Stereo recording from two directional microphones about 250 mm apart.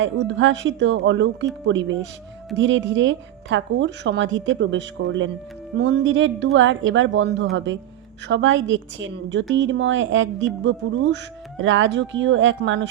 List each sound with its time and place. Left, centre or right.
0.0 s a woman's voice: right